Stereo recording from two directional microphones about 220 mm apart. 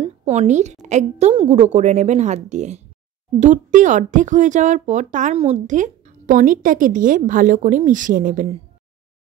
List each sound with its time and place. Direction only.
0.0 s a woman's voice: 30° right (ahead or behind)